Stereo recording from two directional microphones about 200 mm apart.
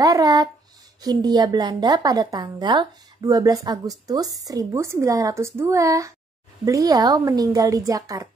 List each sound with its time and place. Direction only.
0.0 s a woman's voice: 20° right (ahead or behind)